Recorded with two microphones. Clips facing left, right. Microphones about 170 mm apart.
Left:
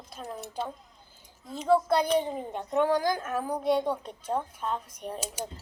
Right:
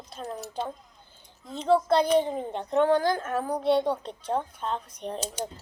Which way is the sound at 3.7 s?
30° right (ahead or behind).